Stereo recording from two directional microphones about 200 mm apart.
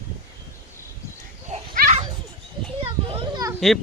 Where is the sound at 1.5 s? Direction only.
35° right (ahead or behind).